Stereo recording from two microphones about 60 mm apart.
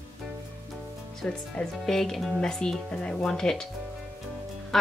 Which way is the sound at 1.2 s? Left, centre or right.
Centre.